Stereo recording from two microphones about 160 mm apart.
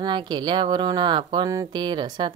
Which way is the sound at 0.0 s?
30° right (ahead or behind).